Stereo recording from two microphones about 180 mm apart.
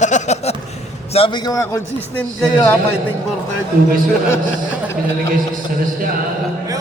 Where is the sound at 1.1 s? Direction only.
25° left (ahead or behind).